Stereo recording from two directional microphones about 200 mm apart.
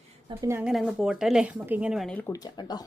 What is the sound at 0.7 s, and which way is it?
Speech, centre (ahead or behind).